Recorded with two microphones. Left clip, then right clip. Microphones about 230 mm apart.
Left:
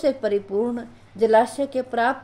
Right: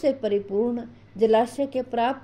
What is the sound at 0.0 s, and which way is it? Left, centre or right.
A woman's voice, centre.